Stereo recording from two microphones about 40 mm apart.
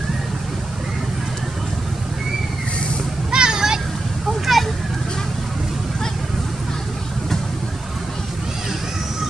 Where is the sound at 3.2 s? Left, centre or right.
Centre.